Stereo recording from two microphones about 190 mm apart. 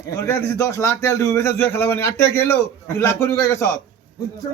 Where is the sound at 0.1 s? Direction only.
15° left (ahead or behind).